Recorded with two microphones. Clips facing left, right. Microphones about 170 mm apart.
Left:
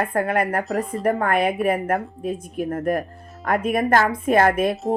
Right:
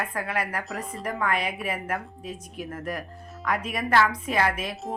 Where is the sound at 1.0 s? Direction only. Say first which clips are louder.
Left 7 dB; 55° left (ahead or behind).